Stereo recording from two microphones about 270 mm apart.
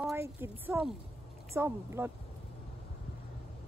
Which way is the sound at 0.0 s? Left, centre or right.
Centre.